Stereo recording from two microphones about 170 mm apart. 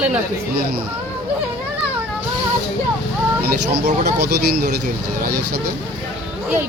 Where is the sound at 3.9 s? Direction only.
45° right (ahead or behind).